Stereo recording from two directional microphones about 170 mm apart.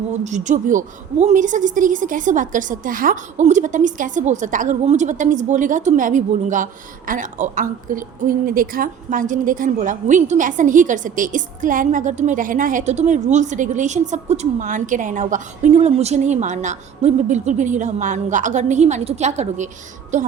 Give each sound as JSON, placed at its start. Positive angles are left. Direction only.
{"t": 0.3, "sound": "a woman's voice", "side_deg": -45}